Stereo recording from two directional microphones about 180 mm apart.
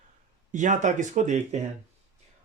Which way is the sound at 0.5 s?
45° right (ahead or behind).